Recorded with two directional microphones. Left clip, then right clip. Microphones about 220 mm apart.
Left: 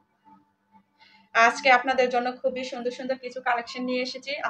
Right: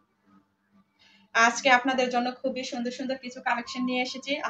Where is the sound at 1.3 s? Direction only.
20° left (ahead or behind).